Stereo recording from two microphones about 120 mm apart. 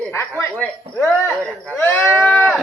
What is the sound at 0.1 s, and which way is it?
Speech, 20° left (ahead or behind).